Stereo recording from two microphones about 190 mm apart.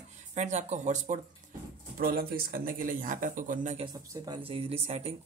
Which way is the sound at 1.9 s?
55° right (ahead or behind).